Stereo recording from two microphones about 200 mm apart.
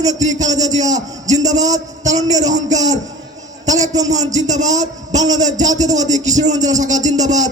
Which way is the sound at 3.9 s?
20° right (ahead or behind).